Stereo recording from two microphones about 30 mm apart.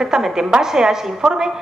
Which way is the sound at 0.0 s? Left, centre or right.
Centre.